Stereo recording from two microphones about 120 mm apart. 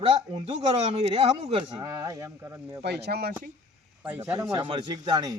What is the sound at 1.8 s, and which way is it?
Speech, 25° right (ahead or behind).